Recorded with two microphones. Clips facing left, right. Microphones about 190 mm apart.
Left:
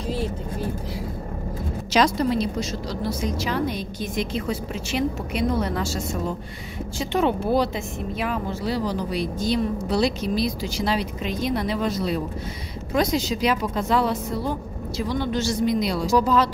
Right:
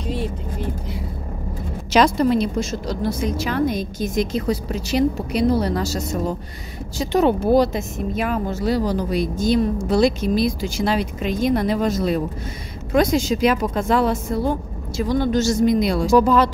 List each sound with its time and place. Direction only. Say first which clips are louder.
0.0 s vehicle: right 1 dB; centre (ahead or behind)
1.9 s a woman's voice: right 4 dB; 55° right (ahead or behind)